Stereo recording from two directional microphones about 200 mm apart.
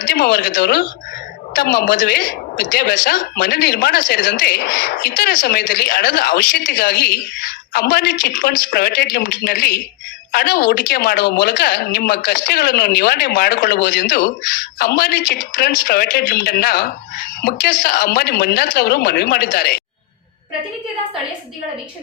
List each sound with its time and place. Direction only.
0.0 s a woman's voice: 50° left (ahead or behind)